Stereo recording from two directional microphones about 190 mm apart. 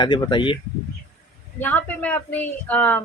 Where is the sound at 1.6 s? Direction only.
10° left (ahead or behind).